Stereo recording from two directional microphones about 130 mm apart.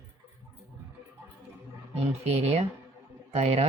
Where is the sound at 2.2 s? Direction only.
55° right (ahead or behind).